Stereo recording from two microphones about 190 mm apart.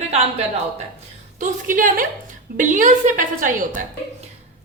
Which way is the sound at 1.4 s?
45° right (ahead or behind).